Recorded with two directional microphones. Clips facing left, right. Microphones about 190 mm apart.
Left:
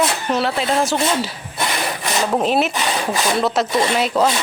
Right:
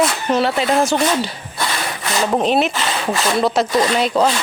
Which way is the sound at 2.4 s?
5° left (ahead or behind).